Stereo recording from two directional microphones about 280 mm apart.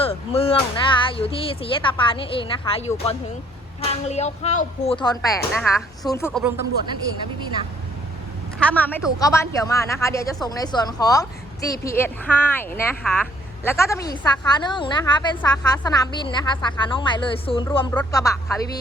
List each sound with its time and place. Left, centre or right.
0.0 s a woman's voice: centre
8.5 s a woman's voice: centre